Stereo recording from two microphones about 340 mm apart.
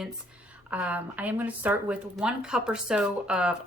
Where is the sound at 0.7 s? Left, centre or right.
Centre.